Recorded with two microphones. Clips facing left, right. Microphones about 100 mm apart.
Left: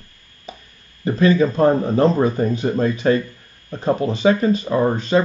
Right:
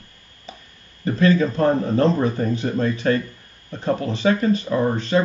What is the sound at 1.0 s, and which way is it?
A man's voice, 15° left (ahead or behind).